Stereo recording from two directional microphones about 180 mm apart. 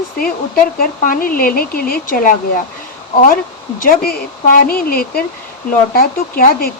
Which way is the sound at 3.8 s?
55° left (ahead or behind).